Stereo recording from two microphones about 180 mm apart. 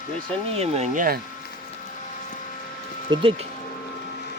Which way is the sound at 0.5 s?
35° right (ahead or behind).